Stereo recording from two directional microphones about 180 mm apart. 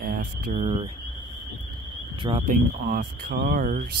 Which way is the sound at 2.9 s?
60° right (ahead or behind).